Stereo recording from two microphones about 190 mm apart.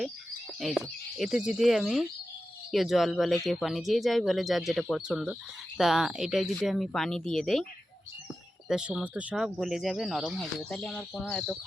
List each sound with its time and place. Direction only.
1.2 s speech: 5° right (ahead or behind)
8.6 s speech: 5° right (ahead or behind)